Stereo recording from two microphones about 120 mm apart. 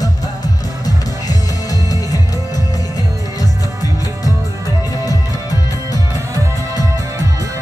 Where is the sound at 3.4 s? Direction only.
30° left (ahead or behind).